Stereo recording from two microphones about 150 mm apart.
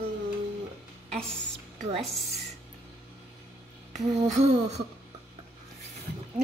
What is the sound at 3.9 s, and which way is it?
Humming, 50° right (ahead or behind).